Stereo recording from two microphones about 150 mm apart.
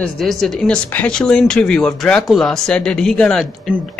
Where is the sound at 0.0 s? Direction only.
Centre (ahead or behind).